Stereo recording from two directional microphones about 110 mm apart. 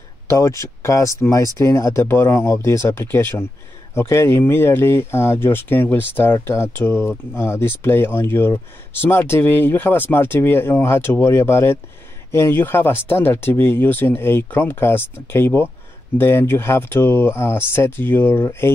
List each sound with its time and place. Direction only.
0.3 s speech: 30° left (ahead or behind)